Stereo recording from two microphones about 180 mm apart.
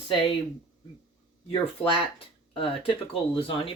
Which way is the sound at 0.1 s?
30° left (ahead or behind).